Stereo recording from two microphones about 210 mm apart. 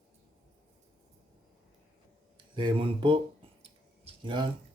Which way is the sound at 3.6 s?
25° right (ahead or behind).